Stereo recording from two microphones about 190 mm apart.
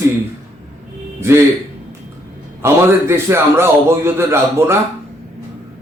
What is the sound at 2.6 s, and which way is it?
A man's voice, 15° right (ahead or behind).